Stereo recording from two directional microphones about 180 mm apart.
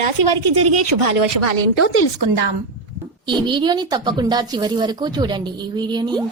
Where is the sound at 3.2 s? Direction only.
25° right (ahead or behind).